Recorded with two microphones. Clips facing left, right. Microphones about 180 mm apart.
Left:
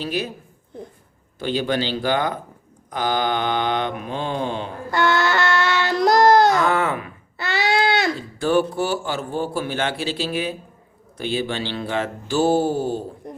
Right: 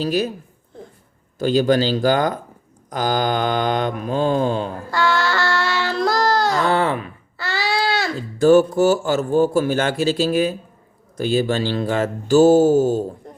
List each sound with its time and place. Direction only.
0.0 s mantra: 40° right (ahead or behind)
1.4 s mantra: 40° right (ahead or behind)
4.9 s child singing: 20° left (ahead or behind)
6.6 s mantra: 35° right (ahead or behind)
7.3 s a sound: 20° left (ahead or behind)
8.4 s speech: 40° right (ahead or behind)
11.2 s mantra: 40° right (ahead or behind)